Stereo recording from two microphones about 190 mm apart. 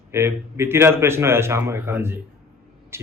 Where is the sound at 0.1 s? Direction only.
15° right (ahead or behind).